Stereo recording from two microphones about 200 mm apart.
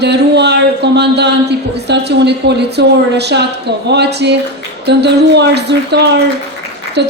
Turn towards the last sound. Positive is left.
turn(degrees=-60)  # may be behind; listen again after turning